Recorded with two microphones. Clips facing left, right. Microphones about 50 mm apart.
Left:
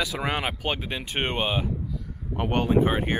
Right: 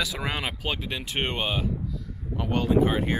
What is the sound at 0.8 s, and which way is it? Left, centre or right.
Speech, centre.